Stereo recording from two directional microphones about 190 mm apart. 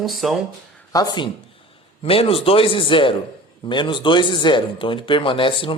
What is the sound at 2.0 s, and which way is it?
Speech, 30° left (ahead or behind).